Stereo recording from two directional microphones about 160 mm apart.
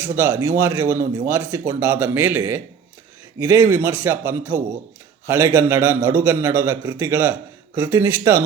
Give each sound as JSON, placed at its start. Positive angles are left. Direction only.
{"t": 0.0, "sound": "a man's voice", "side_deg": -15}